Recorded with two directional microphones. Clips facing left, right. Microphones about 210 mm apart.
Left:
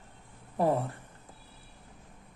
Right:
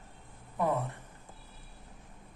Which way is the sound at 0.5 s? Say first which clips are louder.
Left 4 dB; 35° left (ahead or behind).